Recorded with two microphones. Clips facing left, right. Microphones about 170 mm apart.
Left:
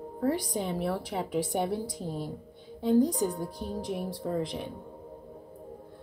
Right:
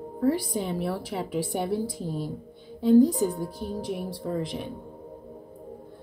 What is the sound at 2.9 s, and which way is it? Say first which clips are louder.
A woman's voice: right 6 dB; 5° right (ahead or behind).